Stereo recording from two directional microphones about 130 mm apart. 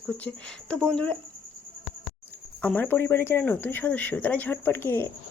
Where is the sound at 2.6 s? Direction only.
10° left (ahead or behind).